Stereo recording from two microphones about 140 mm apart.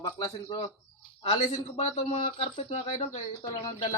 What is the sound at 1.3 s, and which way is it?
Speech, 40° left (ahead or behind).